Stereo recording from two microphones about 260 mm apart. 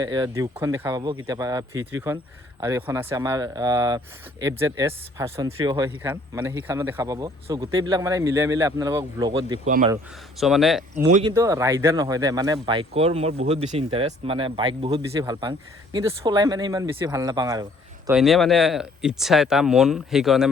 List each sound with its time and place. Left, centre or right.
0.0 s speech: centre
10.4 s speech: centre
11.1 s speech: centre
18.2 s speech: centre